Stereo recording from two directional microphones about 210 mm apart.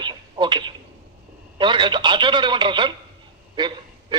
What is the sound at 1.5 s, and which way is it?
Speech, 20° right (ahead or behind).